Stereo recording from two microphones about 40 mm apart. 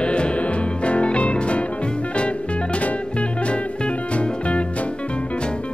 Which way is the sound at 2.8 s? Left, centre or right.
Left.